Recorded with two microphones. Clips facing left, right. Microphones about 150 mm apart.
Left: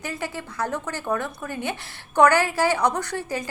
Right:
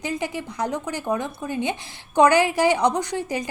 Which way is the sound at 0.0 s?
15° right (ahead or behind).